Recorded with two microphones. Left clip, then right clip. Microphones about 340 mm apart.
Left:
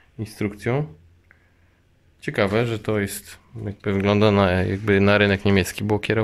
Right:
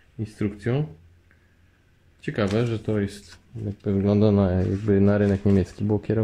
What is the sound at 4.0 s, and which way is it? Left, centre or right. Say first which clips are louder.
Speech: left 4 dB; left.